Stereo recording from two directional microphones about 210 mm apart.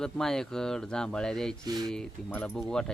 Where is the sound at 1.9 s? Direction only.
5° left (ahead or behind).